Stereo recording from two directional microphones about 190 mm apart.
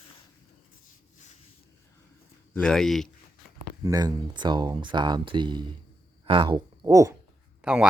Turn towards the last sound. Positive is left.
turn(degrees=-5)  # may be behind; listen again after turning